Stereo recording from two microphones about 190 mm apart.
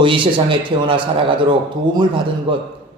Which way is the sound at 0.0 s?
25° right (ahead or behind).